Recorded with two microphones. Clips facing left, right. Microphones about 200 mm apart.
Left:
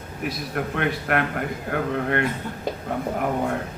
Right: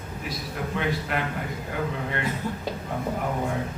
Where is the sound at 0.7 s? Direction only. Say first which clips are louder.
Left 3 dB; 60° left (ahead or behind).